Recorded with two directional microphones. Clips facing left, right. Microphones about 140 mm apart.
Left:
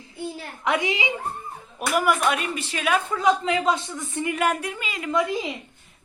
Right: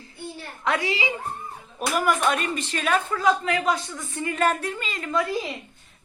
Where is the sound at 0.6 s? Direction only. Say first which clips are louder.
Left 1 dB; 20° left (ahead or behind).